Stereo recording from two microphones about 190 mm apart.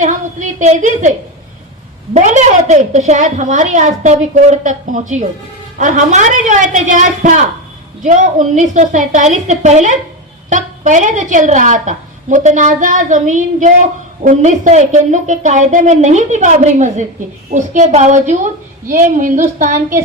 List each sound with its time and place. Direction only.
0.0 s a woman's voice: 40° right (ahead or behind)
2.1 s a woman's voice: 40° right (ahead or behind)